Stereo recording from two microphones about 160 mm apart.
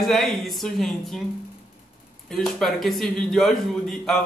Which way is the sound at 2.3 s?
Centre (ahead or behind).